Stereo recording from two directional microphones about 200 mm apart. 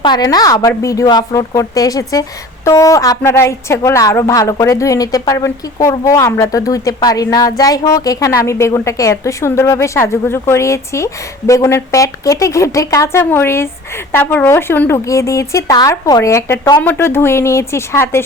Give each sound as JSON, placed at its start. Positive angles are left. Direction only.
{"t": 0.0, "sound": "speech", "side_deg": 20}